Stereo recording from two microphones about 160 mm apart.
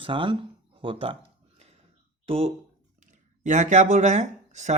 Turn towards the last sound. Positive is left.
turn(degrees=-45)  # may be behind; listen again after turning